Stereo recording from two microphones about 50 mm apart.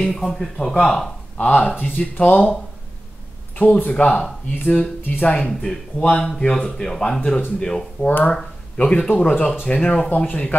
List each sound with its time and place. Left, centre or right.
0.0 s speech: centre
1.4 s speech: left
5.5 s speech: centre; by 10.5 s left